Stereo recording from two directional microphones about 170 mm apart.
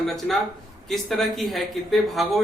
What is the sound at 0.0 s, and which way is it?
Speech, centre (ahead or behind).